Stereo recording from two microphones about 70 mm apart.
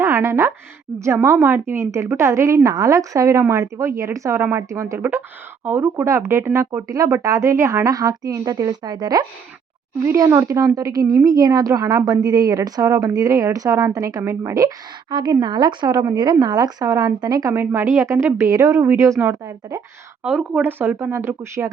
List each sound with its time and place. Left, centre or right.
0.0 s a sound: right
0.9 s speech: right
2.6 s speech: right
5.6 s speech: right
10.2 s speech: right
10.8 s a woman's voice: right
15.1 s a woman's voice: right
17.5 s a woman's voice: right
18.3 s speech: right
20.2 s speech: centre
20.7 s a woman's voice: right
21.1 s speech: right